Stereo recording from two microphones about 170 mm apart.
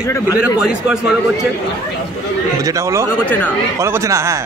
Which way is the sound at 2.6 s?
20° right (ahead or behind).